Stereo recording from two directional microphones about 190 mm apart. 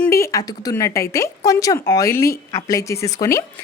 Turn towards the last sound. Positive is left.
turn(degrees=15)  # may be behind; listen again after turning